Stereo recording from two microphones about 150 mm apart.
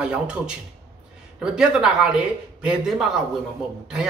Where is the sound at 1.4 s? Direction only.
5° right (ahead or behind).